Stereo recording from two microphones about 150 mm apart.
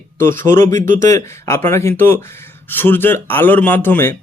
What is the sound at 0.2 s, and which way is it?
Speech, 15° left (ahead or behind).